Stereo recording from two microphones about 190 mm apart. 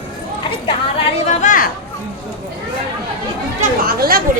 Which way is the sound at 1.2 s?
45° left (ahead or behind).